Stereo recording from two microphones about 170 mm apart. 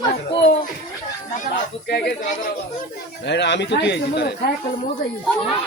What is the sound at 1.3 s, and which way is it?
Speech, 50° left (ahead or behind).